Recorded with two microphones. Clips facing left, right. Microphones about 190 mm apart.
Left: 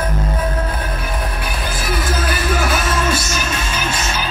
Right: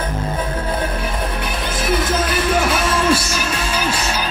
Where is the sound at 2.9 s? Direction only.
30° right (ahead or behind).